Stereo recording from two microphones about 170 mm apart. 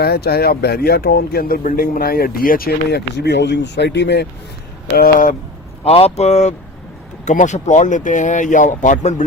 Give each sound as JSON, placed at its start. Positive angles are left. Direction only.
{"t": 0.0, "sound": "speech", "side_deg": 65}
{"t": 4.9, "sound": "speech", "side_deg": 55}
{"t": 5.8, "sound": "speech", "side_deg": 35}